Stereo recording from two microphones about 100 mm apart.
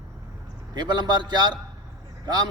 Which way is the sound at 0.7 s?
45° right (ahead or behind).